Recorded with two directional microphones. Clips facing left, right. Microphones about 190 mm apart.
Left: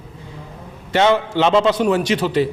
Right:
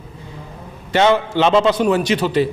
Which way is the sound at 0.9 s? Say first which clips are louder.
Right 1 dB; 10° right (ahead or behind).